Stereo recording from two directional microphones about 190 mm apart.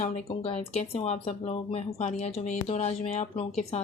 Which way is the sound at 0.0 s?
30° left (ahead or behind).